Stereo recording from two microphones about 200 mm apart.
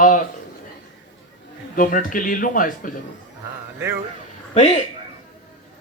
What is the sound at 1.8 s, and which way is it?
Speech, 45° left (ahead or behind).